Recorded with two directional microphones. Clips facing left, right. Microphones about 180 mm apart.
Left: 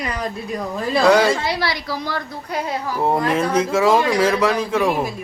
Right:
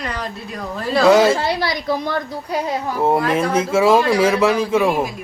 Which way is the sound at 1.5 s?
20° right (ahead or behind).